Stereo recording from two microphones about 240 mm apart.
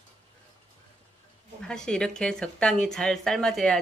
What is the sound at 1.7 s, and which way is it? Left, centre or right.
A woman's voice, centre.